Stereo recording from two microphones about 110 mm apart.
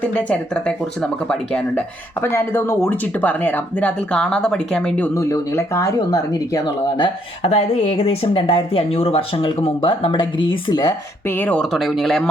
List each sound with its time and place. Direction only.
0.0 s speech: 10° left (ahead or behind)
2.2 s speech: 20° left (ahead or behind)
5.1 s speech: 30° left (ahead or behind)
7.4 s speech: 65° left (ahead or behind); by 10.9 s 40° left (ahead or behind)
11.3 s speech: 15° left (ahead or behind)
11.6 s speech: centre (ahead or behind)